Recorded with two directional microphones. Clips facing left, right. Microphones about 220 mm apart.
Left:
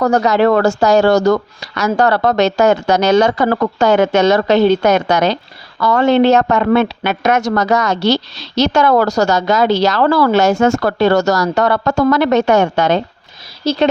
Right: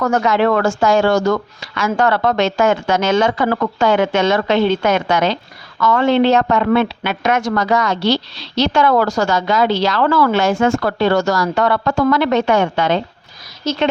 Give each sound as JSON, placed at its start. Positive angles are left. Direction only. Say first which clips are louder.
{"t": 0.0, "sound": "speech", "louder": "left 3 dB", "side_deg": 35}
{"t": 13.6, "sound": "speech", "louder": "left 4 dB", "side_deg": 30}